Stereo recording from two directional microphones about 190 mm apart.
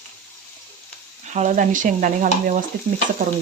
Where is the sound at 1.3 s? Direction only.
40° right (ahead or behind).